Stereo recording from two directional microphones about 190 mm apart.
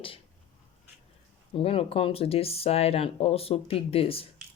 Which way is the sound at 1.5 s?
30° left (ahead or behind).